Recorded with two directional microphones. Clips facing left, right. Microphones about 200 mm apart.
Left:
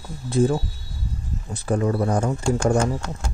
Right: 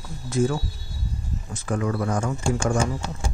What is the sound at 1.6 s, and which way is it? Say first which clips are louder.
Speech: left 4 dB; 35° left (ahead or behind).